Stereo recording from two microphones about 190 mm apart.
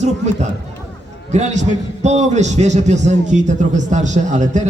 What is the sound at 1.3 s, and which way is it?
A man's voice, 35° right (ahead or behind).